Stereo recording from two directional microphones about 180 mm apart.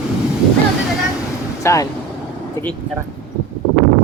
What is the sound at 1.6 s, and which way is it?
Speech, 15° left (ahead or behind).